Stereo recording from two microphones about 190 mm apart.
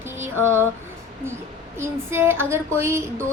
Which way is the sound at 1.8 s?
15° right (ahead or behind).